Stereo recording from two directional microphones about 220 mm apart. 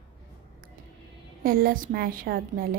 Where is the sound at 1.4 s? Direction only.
40° right (ahead or behind).